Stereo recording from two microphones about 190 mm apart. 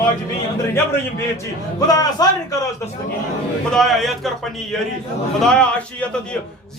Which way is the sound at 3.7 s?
Centre (ahead or behind).